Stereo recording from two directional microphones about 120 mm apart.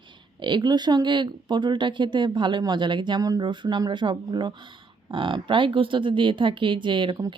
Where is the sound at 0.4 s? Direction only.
40° right (ahead or behind).